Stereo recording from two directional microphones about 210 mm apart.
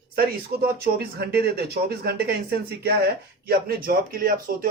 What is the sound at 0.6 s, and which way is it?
Speech, 50° right (ahead or behind).